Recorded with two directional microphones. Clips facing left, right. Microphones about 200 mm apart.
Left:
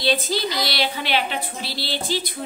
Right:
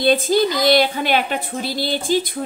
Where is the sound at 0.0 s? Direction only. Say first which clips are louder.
Right 7 dB; 50° right (ahead or behind).